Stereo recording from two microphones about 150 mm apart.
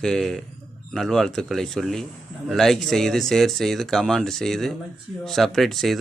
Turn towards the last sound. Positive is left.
turn(degrees=0)  # may be behind; listen again after turning